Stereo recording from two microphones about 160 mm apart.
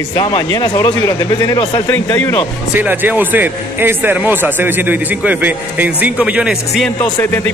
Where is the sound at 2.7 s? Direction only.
10° right (ahead or behind).